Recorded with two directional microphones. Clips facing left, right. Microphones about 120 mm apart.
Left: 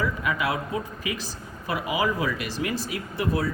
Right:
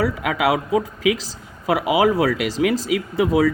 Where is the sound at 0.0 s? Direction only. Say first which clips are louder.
Right 7 dB; 90° right.